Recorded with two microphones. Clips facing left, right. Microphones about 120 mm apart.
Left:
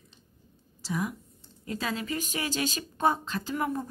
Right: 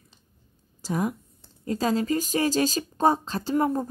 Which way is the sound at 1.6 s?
35° right (ahead or behind).